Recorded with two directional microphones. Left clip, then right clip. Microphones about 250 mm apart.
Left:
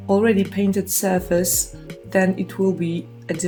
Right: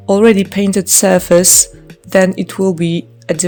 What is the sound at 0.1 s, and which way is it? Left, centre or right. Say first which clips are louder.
Speech: right 8 dB; right.